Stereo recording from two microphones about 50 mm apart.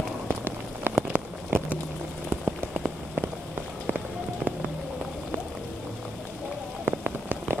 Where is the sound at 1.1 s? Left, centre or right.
Right.